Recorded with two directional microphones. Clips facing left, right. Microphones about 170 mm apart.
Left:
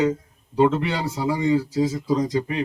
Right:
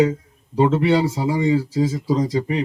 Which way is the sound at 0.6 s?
25° right (ahead or behind).